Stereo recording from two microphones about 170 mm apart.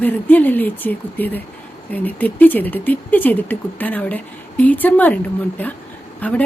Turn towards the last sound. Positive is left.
turn(degrees=10)  # may be behind; listen again after turning